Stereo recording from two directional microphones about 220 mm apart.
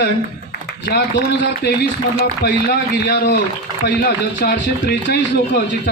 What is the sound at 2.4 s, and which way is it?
Speech, 45° left (ahead or behind).